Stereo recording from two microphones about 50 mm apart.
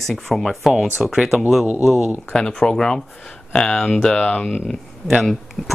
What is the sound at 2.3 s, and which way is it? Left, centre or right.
Speech, centre.